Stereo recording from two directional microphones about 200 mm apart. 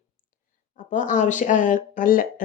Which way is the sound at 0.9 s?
40° left (ahead or behind).